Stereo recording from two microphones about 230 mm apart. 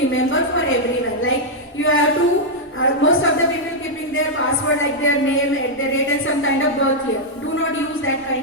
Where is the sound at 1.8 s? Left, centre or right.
Left.